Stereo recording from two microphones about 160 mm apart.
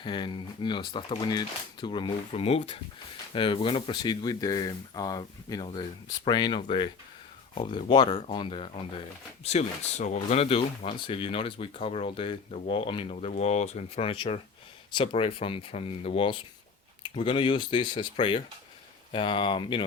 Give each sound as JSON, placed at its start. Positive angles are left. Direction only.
{"t": 0.0, "sound": "speech", "side_deg": 30}